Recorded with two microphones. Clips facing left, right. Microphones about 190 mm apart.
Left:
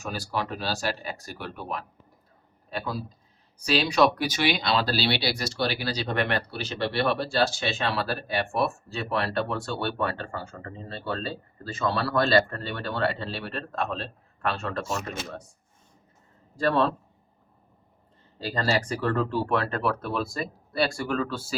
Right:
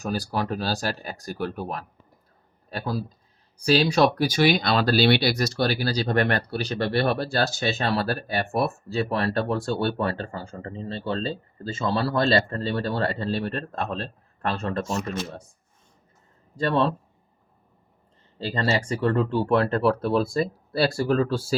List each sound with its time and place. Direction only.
0.0 s a man's voice: 35° right (ahead or behind)
18.3 s speech: 25° right (ahead or behind)